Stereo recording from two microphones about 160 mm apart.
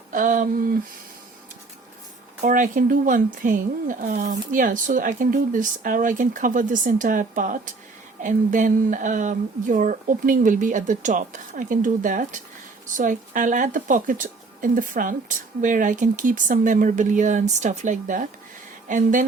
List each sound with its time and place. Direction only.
0.1 s speech: 55° right (ahead or behind)
2.4 s speech: 55° right (ahead or behind)